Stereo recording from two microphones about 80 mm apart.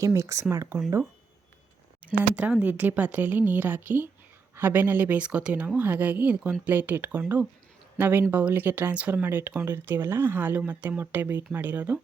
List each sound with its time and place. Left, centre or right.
0.0 s speech: right
2.3 s speech: centre